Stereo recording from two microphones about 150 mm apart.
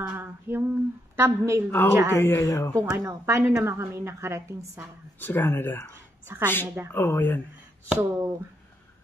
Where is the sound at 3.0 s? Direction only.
20° right (ahead or behind).